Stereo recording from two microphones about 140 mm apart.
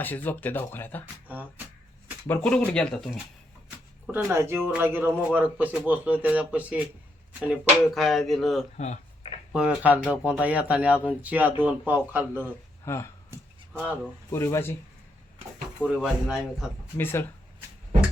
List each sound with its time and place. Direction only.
0.0 s speech: 15° left (ahead or behind)
1.0 s a man's voice: 10° right (ahead or behind)
2.4 s speech: 5° left (ahead or behind)
4.1 s a man's voice: 20° right (ahead or behind)
7.9 s speech: centre (ahead or behind)
8.8 s a sound: 55° left (ahead or behind)
9.5 s a man's voice: 5° right (ahead or behind)
12.8 s speech: 20° left (ahead or behind)
13.7 s a man's voice: 10° right (ahead or behind)
14.3 s speech: 20° left (ahead or behind)
15.8 s speech: centre (ahead or behind)
17.0 s speech: 15° left (ahead or behind)